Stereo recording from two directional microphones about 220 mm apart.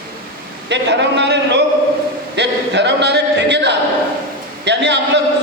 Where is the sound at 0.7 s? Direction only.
50° right (ahead or behind).